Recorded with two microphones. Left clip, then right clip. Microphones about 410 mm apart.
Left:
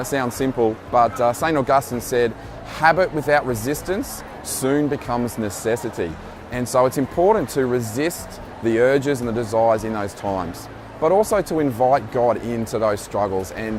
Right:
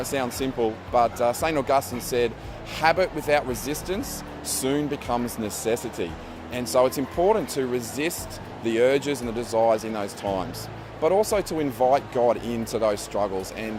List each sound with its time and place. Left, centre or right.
0.0 s speech: left